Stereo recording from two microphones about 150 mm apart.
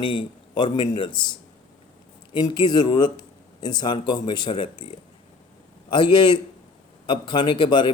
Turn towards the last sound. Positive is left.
turn(degrees=30)  # may be behind; listen again after turning